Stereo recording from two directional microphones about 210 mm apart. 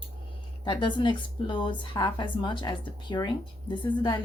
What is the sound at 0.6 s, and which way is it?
A woman's voice, 20° left (ahead or behind).